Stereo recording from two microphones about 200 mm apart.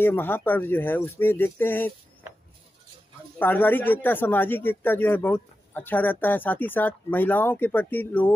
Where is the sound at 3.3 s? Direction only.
10° left (ahead or behind).